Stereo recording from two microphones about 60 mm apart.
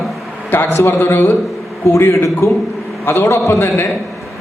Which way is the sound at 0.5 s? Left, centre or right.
Left.